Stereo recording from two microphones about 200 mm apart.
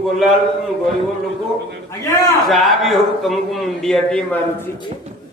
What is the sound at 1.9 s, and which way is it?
Speech, 15° left (ahead or behind).